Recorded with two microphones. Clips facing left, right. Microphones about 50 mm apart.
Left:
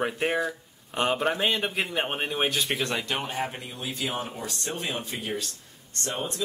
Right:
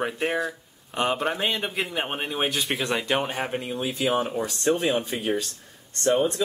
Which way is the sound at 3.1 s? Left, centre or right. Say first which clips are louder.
Right 4 dB; right.